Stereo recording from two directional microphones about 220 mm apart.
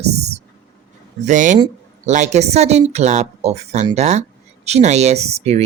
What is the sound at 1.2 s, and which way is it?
A woman's voice, 35° right (ahead or behind).